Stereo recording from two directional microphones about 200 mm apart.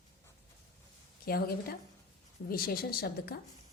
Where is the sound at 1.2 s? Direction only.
50° left (ahead or behind).